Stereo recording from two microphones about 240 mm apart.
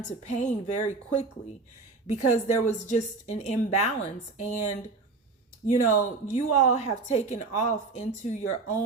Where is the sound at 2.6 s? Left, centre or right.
Left.